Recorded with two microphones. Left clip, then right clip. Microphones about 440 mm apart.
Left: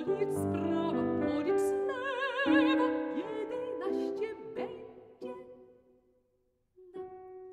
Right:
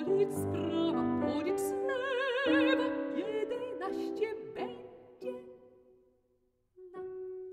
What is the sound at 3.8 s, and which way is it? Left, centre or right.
Music, right.